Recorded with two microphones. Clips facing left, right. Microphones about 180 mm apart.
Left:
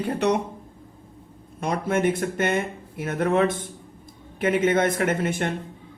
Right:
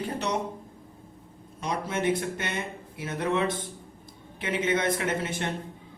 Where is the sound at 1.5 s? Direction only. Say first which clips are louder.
Left 6 dB; 50° left (ahead or behind).